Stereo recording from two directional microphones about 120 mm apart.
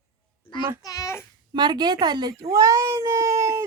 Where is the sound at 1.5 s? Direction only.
35° right (ahead or behind).